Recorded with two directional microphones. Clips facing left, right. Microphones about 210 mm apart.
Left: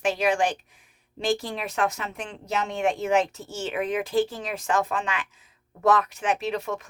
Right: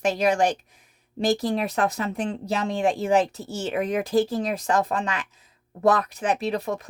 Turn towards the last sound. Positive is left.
turn(degrees=-35)  # may be behind; listen again after turning